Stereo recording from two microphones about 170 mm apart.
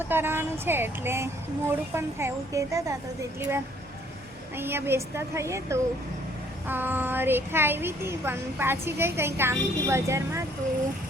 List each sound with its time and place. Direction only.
0.1 s speech: 15° right (ahead or behind)